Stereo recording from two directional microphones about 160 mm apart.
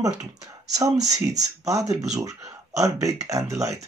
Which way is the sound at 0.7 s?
20° right (ahead or behind).